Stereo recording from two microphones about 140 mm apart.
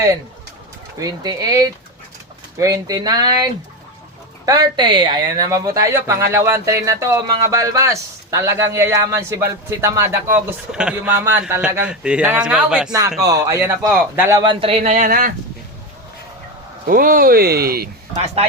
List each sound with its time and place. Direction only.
0.9 s speech: 30° right (ahead or behind)
10.7 s a man's voice: 5° right (ahead or behind)
12.9 s speech: 25° right (ahead or behind)
14.4 s speech: 40° right (ahead or behind); by 15.3 s 60° right (ahead or behind)
16.8 s speech: 90° right